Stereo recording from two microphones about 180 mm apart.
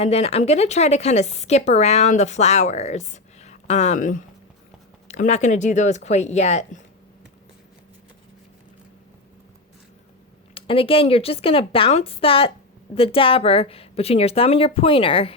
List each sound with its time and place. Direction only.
0.0 s speech: 35° left (ahead or behind)
10.5 s speech: 30° left (ahead or behind)